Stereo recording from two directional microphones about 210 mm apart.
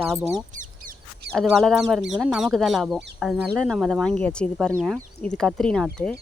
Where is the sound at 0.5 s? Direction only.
40° right (ahead or behind).